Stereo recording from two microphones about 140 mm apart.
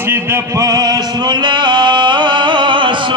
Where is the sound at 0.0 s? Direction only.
15° right (ahead or behind).